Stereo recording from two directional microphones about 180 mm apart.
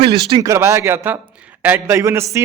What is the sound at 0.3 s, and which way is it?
A man's voice, 20° right (ahead or behind).